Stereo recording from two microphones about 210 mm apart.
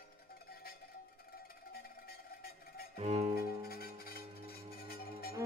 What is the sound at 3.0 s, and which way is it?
Music, 30° right (ahead or behind).